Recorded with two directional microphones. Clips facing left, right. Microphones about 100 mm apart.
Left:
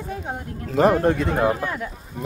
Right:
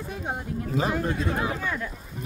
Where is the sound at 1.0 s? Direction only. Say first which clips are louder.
Left 8 dB; 60° left (ahead or behind).